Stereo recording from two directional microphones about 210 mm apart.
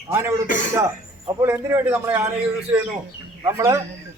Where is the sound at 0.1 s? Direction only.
10° right (ahead or behind).